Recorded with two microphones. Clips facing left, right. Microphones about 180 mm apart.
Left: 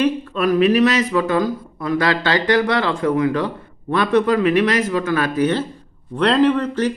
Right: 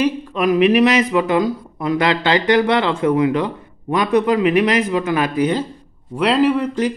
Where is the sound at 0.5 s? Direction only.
20° right (ahead or behind).